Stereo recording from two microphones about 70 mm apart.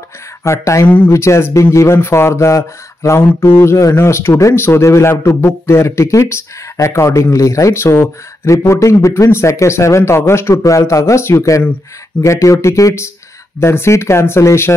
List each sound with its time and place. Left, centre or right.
0.4 s speech: left
0.8 s speech: left
1.1 s speech: left
3.7 s speech: left